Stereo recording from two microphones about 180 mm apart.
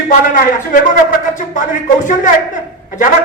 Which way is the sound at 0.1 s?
50° left (ahead or behind).